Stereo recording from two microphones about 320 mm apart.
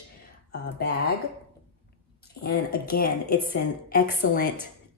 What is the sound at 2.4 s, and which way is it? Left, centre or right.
A woman's voice, left.